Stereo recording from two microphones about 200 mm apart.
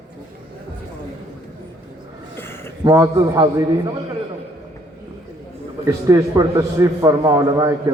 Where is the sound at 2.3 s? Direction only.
10° left (ahead or behind).